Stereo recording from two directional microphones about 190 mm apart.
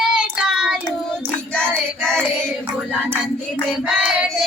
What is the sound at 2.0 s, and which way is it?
Child singing, 5° left (ahead or behind).